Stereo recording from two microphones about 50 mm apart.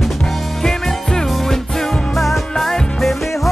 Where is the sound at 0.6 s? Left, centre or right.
Centre.